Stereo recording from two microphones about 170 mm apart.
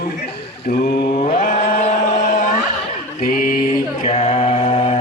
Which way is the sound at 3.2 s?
60° left (ahead or behind).